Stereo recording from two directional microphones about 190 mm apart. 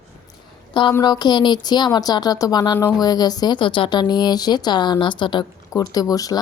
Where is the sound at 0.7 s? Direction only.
25° left (ahead or behind).